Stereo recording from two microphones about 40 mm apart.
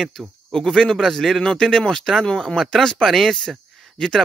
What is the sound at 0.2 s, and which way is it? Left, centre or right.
Speech, centre.